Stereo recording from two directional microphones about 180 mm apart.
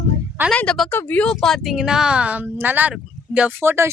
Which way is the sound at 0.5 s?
5° left (ahead or behind).